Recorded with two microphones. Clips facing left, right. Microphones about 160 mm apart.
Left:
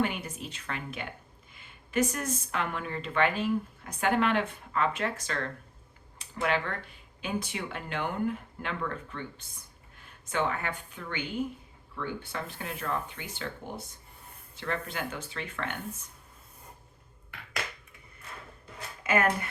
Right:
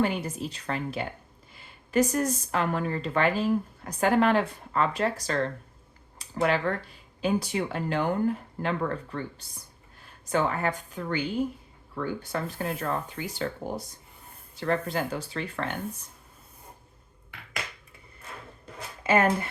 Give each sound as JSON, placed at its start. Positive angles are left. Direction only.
{"t": 0.0, "sound": "speech", "side_deg": -35}
{"t": 19.0, "sound": "speech", "side_deg": -30}